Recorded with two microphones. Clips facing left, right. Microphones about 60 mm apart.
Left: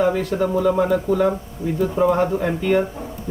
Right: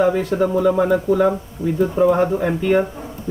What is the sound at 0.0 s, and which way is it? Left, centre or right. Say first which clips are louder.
Speech: right 2 dB; centre.